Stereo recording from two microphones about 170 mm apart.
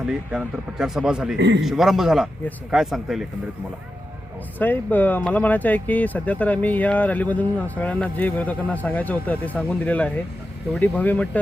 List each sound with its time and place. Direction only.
0.0 s a man's voice: 5° right (ahead or behind)
1.4 s a man's voice: 90° right
1.6 s a man's voice: centre (ahead or behind)
4.5 s speech: 10° left (ahead or behind)